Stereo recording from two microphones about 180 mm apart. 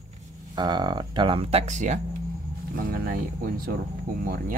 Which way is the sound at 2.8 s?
55° right (ahead or behind).